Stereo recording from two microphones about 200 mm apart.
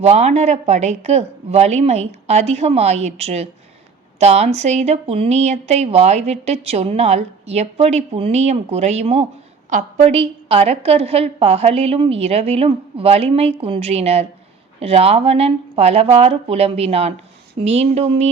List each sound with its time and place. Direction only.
0.0 s a woman's voice: 35° right (ahead or behind)